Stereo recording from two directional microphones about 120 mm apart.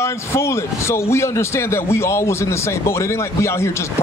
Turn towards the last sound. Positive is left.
turn(degrees=25)  # may be behind; listen again after turning